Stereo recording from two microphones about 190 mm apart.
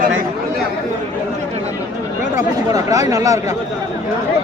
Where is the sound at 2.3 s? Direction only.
20° right (ahead or behind).